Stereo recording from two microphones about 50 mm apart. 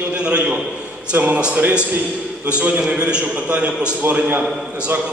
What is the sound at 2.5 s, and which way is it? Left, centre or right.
A man's voice, right.